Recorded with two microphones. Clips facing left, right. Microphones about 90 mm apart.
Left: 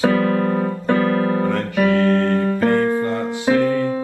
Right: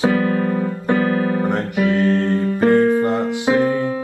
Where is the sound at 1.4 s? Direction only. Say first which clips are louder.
Left 1 dB; 20° right (ahead or behind).